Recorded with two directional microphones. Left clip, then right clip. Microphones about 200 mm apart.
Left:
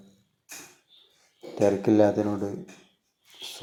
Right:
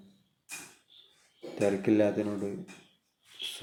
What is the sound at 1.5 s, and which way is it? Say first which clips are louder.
Speech: left 5 dB; 10° left (ahead or behind).